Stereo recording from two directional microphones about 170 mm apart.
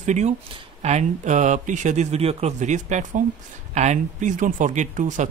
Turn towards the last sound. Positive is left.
turn(degrees=-45)  # may be behind; listen again after turning